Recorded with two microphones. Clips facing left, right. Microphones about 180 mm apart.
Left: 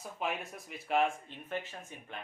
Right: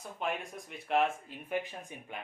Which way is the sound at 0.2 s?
5° left (ahead or behind).